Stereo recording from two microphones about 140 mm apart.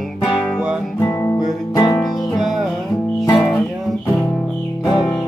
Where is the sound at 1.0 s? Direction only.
20° left (ahead or behind).